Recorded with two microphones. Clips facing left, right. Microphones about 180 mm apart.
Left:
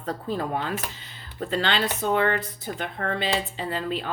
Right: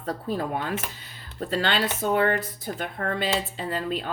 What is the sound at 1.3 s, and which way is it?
Speech, 45° right (ahead or behind).